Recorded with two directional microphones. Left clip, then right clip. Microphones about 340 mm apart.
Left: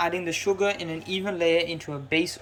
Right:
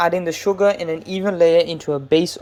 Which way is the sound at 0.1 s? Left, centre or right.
Centre.